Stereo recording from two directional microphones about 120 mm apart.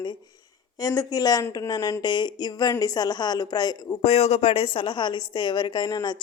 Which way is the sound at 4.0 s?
60° left (ahead or behind).